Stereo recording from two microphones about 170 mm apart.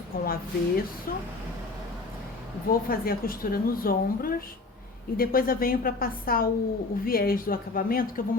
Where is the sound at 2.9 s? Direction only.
60° left (ahead or behind).